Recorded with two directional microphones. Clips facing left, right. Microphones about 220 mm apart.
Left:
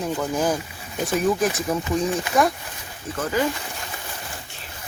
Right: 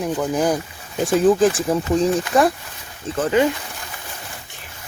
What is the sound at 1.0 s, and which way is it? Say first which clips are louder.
Speech: right 6 dB; 30° right (ahead or behind).